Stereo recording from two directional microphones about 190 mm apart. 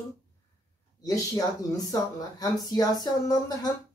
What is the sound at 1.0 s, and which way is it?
Speech, 20° left (ahead or behind).